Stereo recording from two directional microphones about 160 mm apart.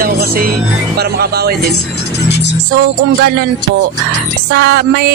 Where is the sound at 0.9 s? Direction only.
80° right.